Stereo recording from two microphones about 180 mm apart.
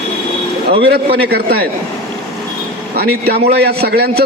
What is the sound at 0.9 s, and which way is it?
Speech, 60° right (ahead or behind).